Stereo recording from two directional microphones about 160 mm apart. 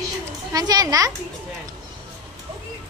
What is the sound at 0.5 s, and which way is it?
Speech, 25° right (ahead or behind).